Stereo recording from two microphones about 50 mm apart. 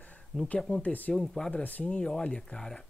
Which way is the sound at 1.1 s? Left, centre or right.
Centre.